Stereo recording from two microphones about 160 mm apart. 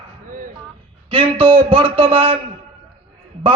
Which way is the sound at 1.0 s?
35° right (ahead or behind).